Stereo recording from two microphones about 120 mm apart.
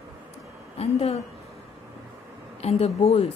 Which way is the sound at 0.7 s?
60° left (ahead or behind).